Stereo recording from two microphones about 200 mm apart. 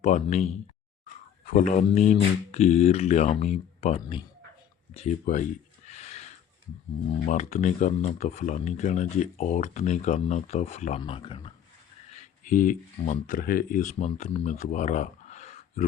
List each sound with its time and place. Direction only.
0.0 s speech: 35° left (ahead or behind)
1.5 s speech: 35° left (ahead or behind)
4.9 s a sound: 35° left (ahead or behind)
7.3 s speech: 35° left (ahead or behind)
11.0 s speech: 25° left (ahead or behind)
12.1 s speech: 40° left (ahead or behind)